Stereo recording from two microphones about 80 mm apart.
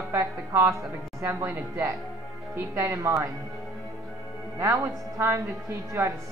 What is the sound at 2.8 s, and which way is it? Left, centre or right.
Speech, right.